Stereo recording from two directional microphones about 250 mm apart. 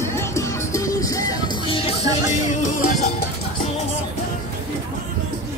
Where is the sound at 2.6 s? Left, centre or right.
Left.